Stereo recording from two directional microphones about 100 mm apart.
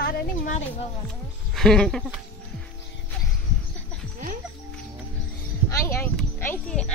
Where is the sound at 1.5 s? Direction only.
5° left (ahead or behind).